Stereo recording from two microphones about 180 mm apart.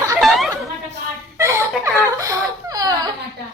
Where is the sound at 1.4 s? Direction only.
15° right (ahead or behind).